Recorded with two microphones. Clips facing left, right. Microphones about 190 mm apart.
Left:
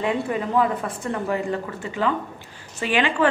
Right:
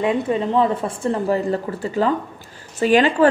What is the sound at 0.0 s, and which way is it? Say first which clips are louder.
Speech: right 4 dB; 25° right (ahead or behind).